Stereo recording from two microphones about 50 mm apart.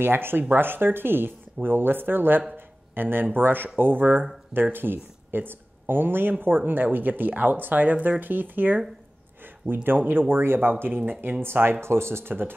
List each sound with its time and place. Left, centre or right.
0.0 s speech: right
2.5 s a sound: right
3.3 s speech: right
9.8 s speech: right
11.8 s speech: right